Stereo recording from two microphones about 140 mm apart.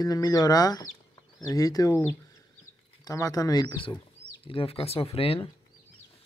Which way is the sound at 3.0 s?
25° left (ahead or behind).